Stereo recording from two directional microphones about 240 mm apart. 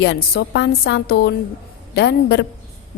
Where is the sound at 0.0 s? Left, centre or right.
Left.